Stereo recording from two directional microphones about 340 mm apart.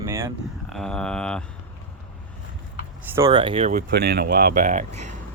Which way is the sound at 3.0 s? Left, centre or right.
Centre.